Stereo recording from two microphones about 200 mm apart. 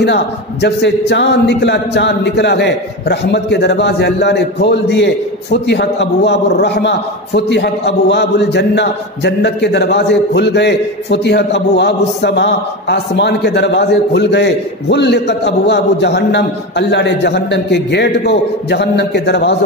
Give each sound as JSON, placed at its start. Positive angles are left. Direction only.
{"t": 0.0, "sound": "a man's voice", "side_deg": 55}